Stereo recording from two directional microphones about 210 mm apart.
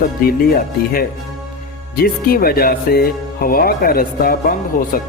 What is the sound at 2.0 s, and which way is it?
Speech, 45° left (ahead or behind).